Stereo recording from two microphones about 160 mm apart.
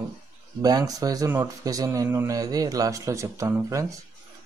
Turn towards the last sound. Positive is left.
turn(degrees=-20)  # may be behind; listen again after turning